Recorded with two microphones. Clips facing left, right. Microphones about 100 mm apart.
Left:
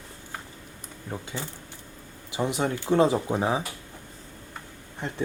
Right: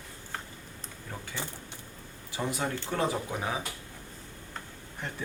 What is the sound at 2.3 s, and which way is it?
Speech, 20° left (ahead or behind).